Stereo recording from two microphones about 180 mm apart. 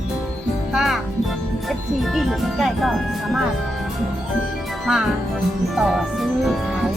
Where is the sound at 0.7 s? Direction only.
Centre (ahead or behind).